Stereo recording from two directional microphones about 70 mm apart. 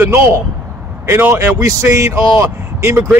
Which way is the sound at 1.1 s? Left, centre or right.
Right.